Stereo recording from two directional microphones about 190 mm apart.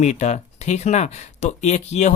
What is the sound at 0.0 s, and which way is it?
Speech, 40° left (ahead or behind).